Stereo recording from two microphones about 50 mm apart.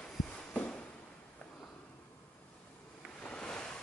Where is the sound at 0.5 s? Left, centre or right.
Left.